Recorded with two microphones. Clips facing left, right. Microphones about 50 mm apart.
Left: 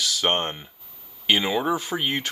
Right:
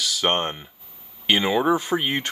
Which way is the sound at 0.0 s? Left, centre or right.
Centre.